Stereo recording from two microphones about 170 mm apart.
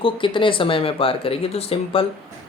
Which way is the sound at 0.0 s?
30° left (ahead or behind).